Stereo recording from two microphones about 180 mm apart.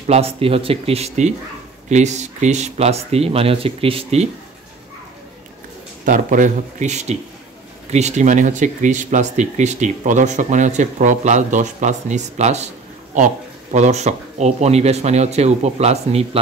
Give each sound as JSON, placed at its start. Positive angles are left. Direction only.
{"t": 0.0, "sound": "speech", "side_deg": -35}
{"t": 6.0, "sound": "speech", "side_deg": -45}